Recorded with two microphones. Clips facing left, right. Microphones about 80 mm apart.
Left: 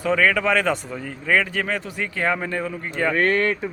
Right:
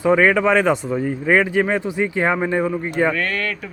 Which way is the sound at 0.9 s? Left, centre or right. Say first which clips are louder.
Right 5 dB; right.